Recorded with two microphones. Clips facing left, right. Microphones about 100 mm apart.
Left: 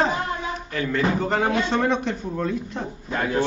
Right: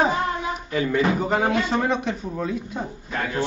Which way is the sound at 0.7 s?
10° right (ahead or behind).